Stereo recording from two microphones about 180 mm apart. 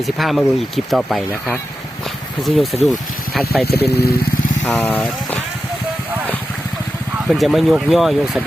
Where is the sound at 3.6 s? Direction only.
60° left (ahead or behind).